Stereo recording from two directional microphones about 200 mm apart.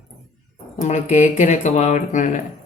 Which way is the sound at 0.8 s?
35° left (ahead or behind).